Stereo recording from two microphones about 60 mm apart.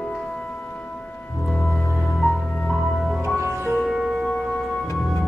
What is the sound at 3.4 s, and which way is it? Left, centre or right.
Music, right.